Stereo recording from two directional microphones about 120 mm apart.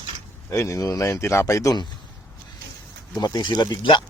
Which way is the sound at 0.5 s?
25° left (ahead or behind).